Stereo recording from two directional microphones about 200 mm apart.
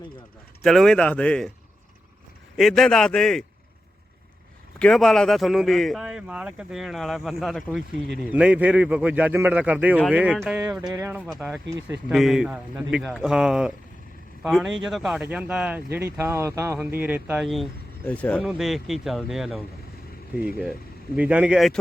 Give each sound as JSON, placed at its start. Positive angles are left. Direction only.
{"t": 0.6, "sound": "speech", "side_deg": 0}
{"t": 2.6, "sound": "speech", "side_deg": 0}
{"t": 4.8, "sound": "a man's voice", "side_deg": 5}
{"t": 10.6, "sound": "a man's voice", "side_deg": -15}
{"t": 11.3, "sound": "a man's voice", "side_deg": 0}
{"t": 21.2, "sound": "speech", "side_deg": -5}